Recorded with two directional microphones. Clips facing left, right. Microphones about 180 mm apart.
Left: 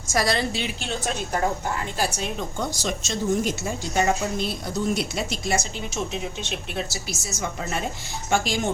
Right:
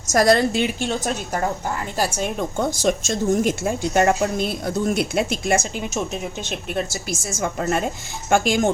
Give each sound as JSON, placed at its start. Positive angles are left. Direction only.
{"t": 0.1, "sound": "a woman's voice", "side_deg": -45}